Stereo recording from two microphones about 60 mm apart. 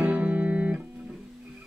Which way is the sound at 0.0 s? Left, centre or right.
Right.